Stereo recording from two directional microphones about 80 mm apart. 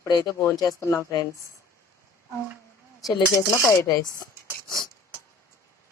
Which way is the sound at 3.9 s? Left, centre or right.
Left.